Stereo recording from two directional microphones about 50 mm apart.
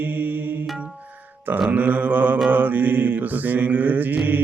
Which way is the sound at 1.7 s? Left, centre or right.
Right.